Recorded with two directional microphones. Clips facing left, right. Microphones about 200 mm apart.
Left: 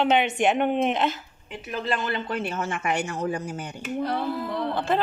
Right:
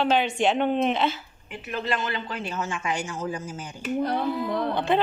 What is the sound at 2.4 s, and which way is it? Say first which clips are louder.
Speech: left 2 dB; 60° left (ahead or behind).